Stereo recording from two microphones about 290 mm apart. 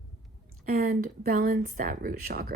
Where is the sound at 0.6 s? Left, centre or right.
Right.